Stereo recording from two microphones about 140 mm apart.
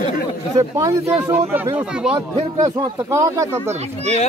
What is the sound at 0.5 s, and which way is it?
Speech, 25° right (ahead or behind).